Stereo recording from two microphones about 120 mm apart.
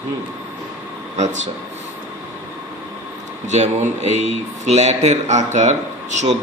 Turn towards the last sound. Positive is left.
turn(degrees=-80)